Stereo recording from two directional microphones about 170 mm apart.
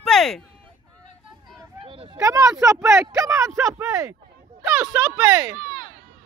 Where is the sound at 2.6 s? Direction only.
20° right (ahead or behind).